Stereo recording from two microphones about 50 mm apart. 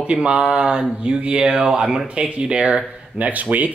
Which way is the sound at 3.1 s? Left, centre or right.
Right.